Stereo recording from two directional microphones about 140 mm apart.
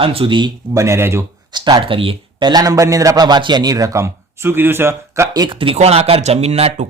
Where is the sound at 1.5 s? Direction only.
35° right (ahead or behind).